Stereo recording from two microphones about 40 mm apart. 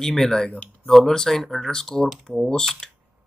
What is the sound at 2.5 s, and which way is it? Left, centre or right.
Speech, centre.